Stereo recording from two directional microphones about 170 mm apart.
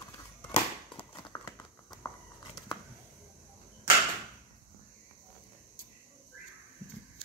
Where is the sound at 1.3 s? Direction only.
15° left (ahead or behind).